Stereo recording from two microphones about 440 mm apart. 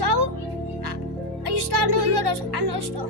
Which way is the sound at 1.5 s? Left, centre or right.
Right.